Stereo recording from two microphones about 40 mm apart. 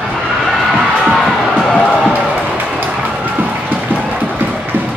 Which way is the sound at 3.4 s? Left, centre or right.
Right.